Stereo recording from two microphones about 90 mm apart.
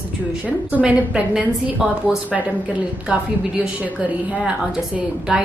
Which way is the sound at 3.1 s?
15° right (ahead or behind).